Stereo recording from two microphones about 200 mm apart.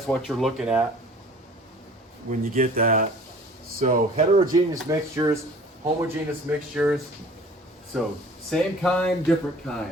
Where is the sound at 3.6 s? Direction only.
50° right (ahead or behind).